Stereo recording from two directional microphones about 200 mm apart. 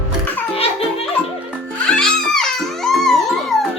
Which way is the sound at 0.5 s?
30° left (ahead or behind).